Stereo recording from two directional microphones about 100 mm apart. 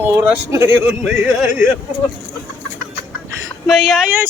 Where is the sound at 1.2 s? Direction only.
10° right (ahead or behind).